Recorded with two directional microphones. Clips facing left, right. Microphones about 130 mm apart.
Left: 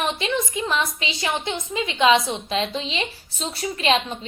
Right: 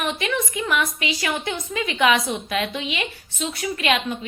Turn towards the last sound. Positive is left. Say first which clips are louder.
# left 1 dB
turn(degrees=30)  # may be behind; listen again after turning